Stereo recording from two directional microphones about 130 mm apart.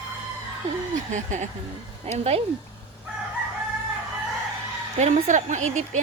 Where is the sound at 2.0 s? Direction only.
55° right (ahead or behind).